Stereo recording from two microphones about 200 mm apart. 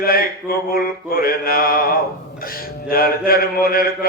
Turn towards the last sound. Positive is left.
turn(degrees=45)  # may be behind; listen again after turning